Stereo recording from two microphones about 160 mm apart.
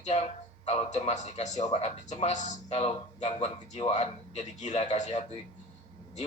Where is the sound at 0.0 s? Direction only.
45° left (ahead or behind).